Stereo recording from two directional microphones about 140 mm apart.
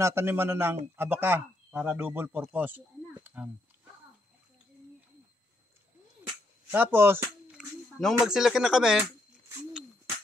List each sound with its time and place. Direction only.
0.0 s speech: 20° right (ahead or behind)
6.7 s speech: 15° right (ahead or behind)
7.5 s speech: centre (ahead or behind)